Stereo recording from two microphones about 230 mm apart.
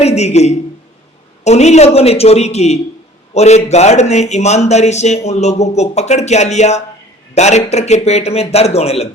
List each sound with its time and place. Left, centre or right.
0.0 s a man's voice: left